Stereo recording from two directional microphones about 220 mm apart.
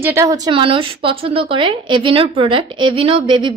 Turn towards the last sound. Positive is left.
turn(degrees=-20)  # may be behind; listen again after turning